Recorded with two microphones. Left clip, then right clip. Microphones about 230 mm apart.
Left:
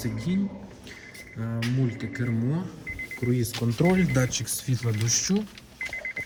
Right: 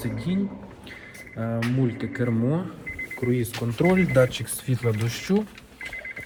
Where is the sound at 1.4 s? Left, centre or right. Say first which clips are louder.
Right 4 dB; centre.